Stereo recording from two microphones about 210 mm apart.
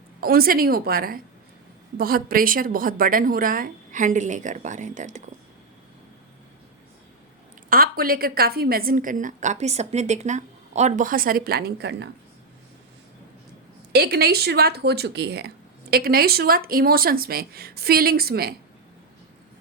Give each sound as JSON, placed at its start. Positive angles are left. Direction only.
{"t": 0.2, "sound": "a woman's voice", "side_deg": -45}
{"t": 7.7, "sound": "speech", "side_deg": -45}
{"t": 13.9, "sound": "speech", "side_deg": -50}